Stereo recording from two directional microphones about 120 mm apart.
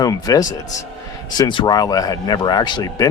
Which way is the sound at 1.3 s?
40° left (ahead or behind).